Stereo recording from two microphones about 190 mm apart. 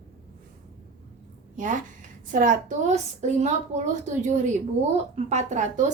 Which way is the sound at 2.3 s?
40° right (ahead or behind).